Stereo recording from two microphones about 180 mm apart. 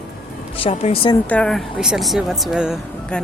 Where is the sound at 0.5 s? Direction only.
30° left (ahead or behind).